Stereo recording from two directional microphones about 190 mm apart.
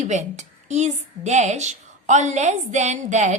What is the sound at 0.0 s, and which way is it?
A woman's voice, 40° right (ahead or behind).